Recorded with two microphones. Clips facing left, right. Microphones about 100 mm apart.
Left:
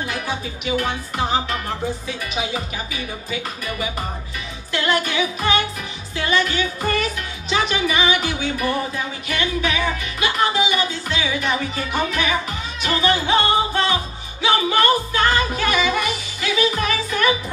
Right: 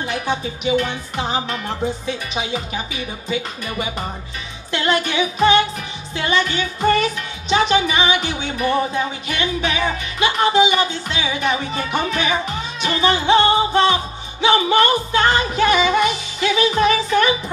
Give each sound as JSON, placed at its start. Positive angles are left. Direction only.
{"t": 0.0, "sound": "speech", "side_deg": -25}
{"t": 4.7, "sound": "speech", "side_deg": -25}
{"t": 10.2, "sound": "speech", "side_deg": -25}